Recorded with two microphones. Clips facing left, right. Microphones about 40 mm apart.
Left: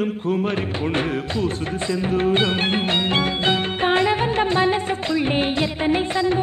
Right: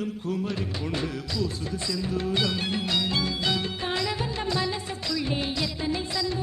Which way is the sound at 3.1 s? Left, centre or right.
Left.